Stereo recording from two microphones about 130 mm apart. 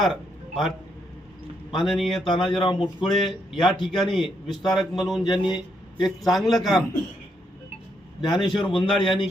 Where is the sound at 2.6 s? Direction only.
40° left (ahead or behind).